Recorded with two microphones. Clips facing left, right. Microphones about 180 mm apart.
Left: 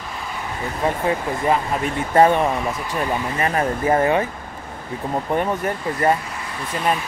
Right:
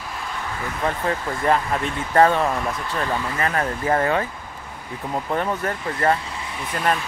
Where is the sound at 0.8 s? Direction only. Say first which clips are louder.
Left 3 dB; 10° left (ahead or behind).